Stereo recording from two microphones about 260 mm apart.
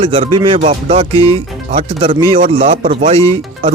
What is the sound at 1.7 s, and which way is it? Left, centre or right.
Speech, centre.